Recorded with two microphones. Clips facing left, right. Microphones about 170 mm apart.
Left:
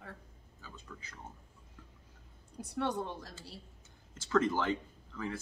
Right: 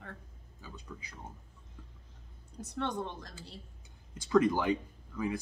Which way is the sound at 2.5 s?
10° left (ahead or behind).